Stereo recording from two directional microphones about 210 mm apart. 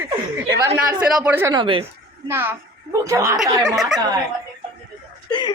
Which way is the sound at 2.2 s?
10° right (ahead or behind).